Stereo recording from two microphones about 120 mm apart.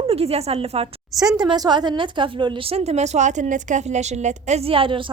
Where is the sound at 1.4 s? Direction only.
35° right (ahead or behind).